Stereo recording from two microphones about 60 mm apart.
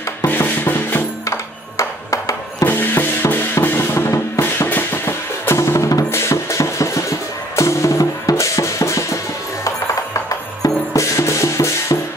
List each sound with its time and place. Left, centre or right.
0.3 s music: left
1.2 s music: left
2.6 s music: left
10.6 s music: left
11.1 s music: left